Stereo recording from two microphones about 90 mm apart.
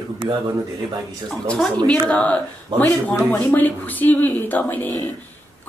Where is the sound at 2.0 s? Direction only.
15° left (ahead or behind).